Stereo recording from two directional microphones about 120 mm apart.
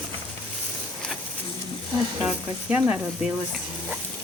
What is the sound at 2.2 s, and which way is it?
Speech, 5° right (ahead or behind).